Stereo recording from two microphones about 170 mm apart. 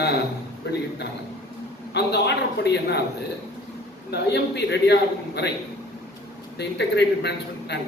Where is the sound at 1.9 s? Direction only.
80° left.